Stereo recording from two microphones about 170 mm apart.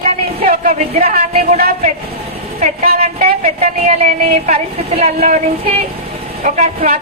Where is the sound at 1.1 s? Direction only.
40° right (ahead or behind).